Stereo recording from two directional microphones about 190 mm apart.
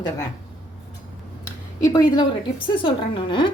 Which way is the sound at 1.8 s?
20° left (ahead or behind).